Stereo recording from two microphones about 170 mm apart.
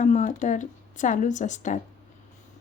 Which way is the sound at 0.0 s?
45° left (ahead or behind).